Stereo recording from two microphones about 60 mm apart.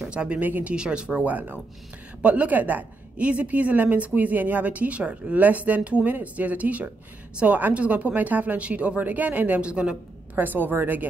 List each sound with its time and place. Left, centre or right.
0.0 s a sound: centre
0.4 s a woman's voice: right
0.7 s a woman's voice: centre
10.3 s a woman's voice: right